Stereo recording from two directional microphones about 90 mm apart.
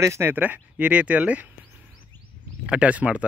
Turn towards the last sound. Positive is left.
turn(degrees=-15)  # may be behind; listen again after turning